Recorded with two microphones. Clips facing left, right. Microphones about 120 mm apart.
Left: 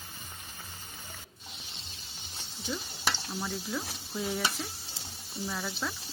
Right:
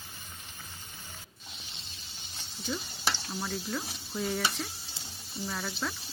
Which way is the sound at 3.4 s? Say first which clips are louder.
Even; centre (ahead or behind).